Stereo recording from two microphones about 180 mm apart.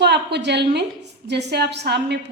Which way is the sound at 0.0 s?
70° right (ahead or behind).